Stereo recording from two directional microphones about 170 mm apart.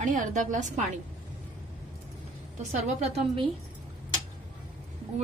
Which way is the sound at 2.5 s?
40° right (ahead or behind).